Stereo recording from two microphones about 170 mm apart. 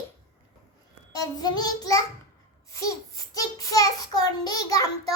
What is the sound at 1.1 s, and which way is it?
Child singing, 20° left (ahead or behind).